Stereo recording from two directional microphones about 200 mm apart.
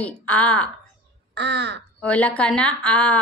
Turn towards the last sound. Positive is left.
turn(degrees=5)  # may be behind; listen again after turning